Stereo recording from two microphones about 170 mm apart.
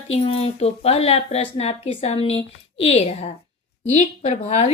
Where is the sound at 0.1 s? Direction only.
35° left (ahead or behind).